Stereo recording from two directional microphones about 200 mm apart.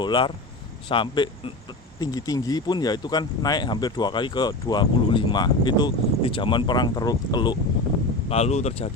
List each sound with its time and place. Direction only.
0.0 s speech: 25° left (ahead or behind)
8.3 s speech: 30° left (ahead or behind)